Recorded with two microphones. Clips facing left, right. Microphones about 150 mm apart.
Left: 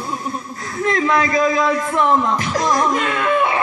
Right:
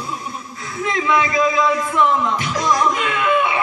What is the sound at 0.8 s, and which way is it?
Music, 40° left (ahead or behind).